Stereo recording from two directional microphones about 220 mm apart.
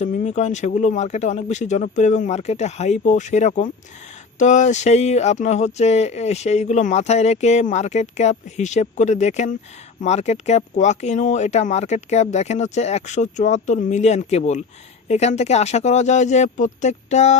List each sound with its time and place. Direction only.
0.0 s speech: 30° left (ahead or behind)